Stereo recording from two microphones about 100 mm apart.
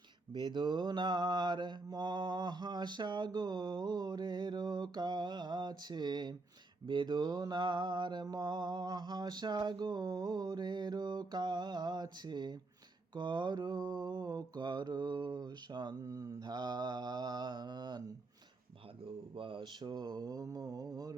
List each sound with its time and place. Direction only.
0.3 s mantra: 50° right (ahead or behind)
19.4 s mantra: 60° right (ahead or behind); by 21.2 s 35° right (ahead or behind)